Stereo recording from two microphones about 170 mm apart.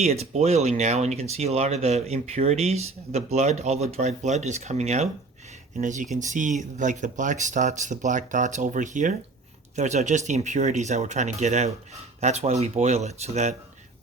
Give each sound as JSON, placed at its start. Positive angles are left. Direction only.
{"t": 0.0, "sound": "speech", "side_deg": -40}